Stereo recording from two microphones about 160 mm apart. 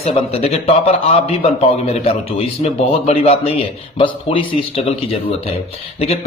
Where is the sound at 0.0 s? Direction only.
40° left (ahead or behind).